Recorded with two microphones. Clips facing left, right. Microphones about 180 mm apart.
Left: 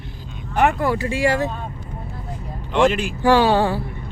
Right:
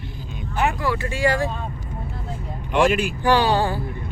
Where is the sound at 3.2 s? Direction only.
25° left (ahead or behind).